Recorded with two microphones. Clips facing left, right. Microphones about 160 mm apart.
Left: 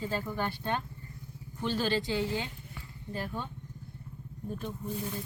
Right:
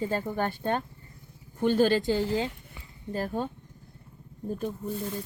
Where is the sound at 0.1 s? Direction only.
50° right (ahead or behind).